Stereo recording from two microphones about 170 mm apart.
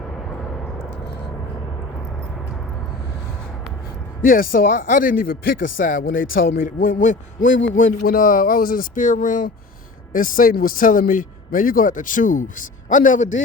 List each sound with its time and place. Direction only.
4.2 s speech: 55° left (ahead or behind)
7.4 s speech: 90° left
8.1 s speech: 55° left (ahead or behind)